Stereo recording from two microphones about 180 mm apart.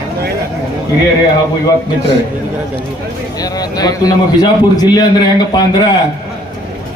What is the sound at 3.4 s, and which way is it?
A man's voice, 20° left (ahead or behind).